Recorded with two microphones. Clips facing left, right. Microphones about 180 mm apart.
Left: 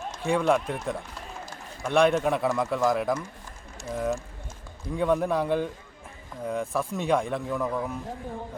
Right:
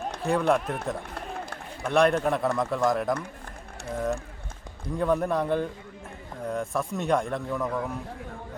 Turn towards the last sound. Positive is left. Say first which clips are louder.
# left 1 dB
turn(degrees=0)  # may be behind; listen again after turning